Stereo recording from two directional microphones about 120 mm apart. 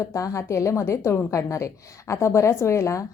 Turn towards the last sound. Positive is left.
turn(degrees=25)  # may be behind; listen again after turning